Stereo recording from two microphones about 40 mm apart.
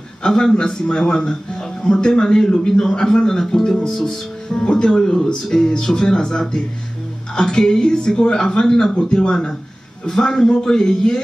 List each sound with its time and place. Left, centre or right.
0.2 s speech: left